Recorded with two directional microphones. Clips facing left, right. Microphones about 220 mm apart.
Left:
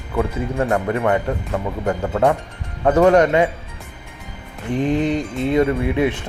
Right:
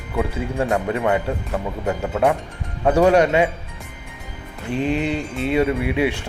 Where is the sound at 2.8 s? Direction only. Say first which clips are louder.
Left 2 dB; 10° right (ahead or behind).